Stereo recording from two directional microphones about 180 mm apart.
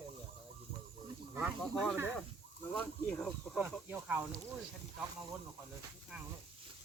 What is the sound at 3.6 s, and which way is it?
Speech, 10° right (ahead or behind).